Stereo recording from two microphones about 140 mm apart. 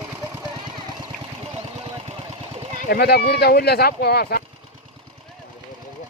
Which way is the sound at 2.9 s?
90° left.